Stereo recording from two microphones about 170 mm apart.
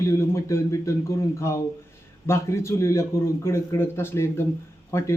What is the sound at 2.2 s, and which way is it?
Speech, 15° left (ahead or behind).